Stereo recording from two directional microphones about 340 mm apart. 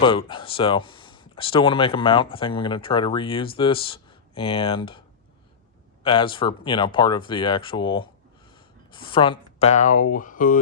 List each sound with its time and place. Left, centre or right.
0.0 s speech: centre